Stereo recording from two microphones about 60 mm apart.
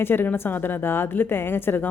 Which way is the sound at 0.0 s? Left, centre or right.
Left.